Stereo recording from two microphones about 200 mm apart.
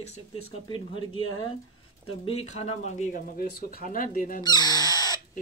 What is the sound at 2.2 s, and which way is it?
Speech, 30° left (ahead or behind).